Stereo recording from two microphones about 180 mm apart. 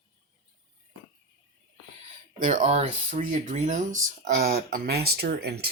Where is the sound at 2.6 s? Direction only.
35° right (ahead or behind).